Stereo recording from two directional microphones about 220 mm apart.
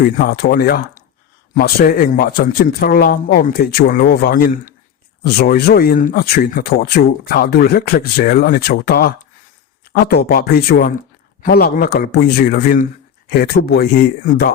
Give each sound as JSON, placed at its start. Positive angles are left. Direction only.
{"t": 0.0, "sound": "speech", "side_deg": 45}